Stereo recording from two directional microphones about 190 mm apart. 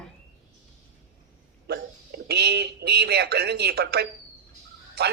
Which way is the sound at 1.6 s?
60° right (ahead or behind).